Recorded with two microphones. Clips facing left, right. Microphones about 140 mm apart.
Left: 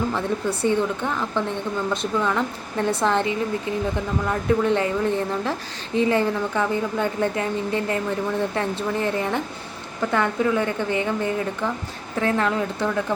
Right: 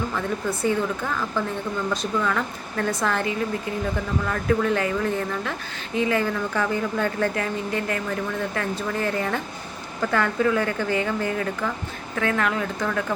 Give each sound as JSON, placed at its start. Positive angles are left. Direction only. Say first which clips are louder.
{"t": 0.1, "sound": "speech", "louder": "left 2 dB", "side_deg": 30}